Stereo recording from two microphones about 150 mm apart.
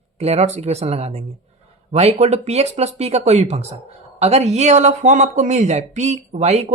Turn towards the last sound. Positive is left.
turn(degrees=-50)  # may be behind; listen again after turning